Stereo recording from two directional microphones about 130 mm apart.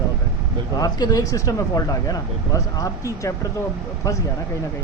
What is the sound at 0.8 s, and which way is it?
Speech, 30° left (ahead or behind).